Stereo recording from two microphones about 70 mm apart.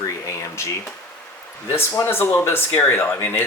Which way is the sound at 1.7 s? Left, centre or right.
Left.